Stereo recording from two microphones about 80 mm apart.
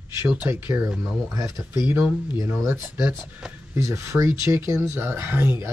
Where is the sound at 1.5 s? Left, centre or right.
Left.